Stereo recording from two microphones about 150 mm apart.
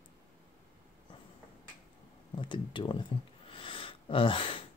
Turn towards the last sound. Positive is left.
turn(degrees=35)  # may be behind; listen again after turning